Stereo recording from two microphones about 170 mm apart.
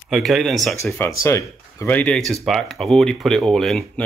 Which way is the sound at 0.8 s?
15° left (ahead or behind).